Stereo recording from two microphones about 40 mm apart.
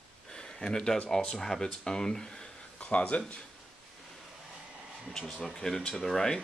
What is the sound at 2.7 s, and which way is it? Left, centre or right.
Speech, left.